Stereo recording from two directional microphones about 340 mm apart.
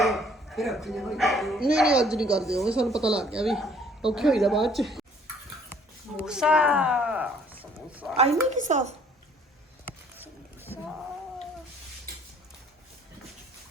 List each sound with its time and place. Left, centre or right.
0.0 s speech: centre
6.1 s speech: centre
8.1 s a woman's voice: centre
10.2 s rowboat: centre